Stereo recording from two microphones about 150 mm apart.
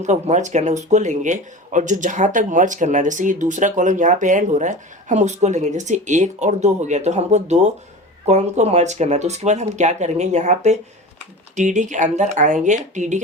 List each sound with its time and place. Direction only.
0.0 s speech: 50° right (ahead or behind)